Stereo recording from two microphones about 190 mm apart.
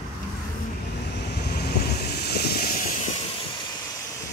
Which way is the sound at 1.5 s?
60° left (ahead or behind).